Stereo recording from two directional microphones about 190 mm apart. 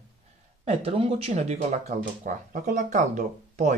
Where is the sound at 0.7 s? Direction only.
30° right (ahead or behind).